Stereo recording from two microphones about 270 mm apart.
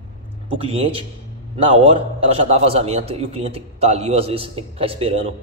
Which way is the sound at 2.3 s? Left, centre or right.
Right.